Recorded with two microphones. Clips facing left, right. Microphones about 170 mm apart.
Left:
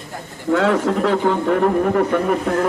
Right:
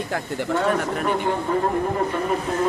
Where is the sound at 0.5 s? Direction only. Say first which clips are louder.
Left 6 dB; 90° left; by 2.6 s 70° left (ahead or behind).